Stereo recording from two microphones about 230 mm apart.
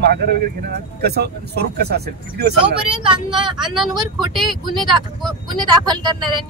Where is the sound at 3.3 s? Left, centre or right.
Centre.